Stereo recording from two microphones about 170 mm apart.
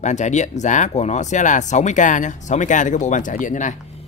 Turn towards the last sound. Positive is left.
turn(degrees=45)  # may be behind; listen again after turning